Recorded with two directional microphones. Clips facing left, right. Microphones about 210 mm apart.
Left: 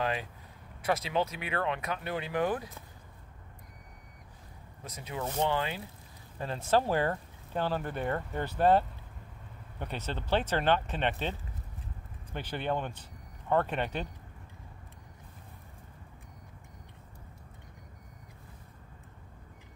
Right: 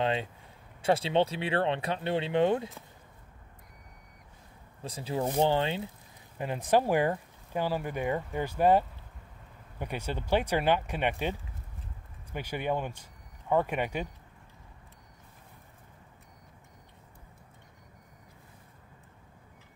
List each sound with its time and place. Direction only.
0.0 s speech: 25° right (ahead or behind)
4.8 s speech: 30° right (ahead or behind)
6.3 s speech: 15° right (ahead or behind)